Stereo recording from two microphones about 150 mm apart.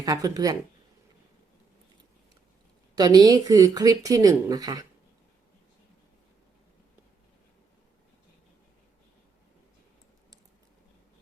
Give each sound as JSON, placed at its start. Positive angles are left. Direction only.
{"t": 0.0, "sound": "speech", "side_deg": -25}
{"t": 2.9, "sound": "speech", "side_deg": -25}